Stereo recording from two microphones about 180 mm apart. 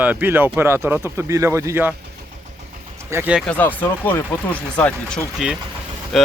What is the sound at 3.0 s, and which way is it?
Speech, 10° right (ahead or behind).